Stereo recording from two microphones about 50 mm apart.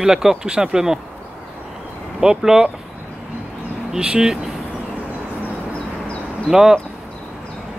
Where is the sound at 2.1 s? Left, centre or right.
Centre.